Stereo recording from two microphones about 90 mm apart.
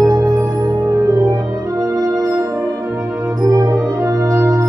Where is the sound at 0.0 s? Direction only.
40° right (ahead or behind).